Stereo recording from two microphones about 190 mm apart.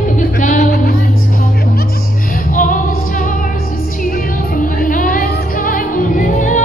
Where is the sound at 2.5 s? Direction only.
45° left (ahead or behind).